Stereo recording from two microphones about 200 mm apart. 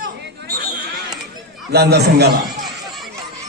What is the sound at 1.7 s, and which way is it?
Speech, 55° right (ahead or behind).